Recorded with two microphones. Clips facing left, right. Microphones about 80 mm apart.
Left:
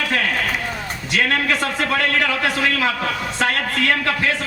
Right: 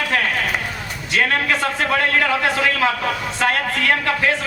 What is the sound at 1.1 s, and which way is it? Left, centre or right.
A man's voice, right.